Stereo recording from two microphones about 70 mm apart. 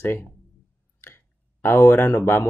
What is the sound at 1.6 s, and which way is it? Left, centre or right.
Speech, left.